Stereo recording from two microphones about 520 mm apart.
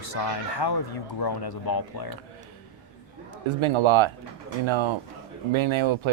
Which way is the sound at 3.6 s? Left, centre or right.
Right.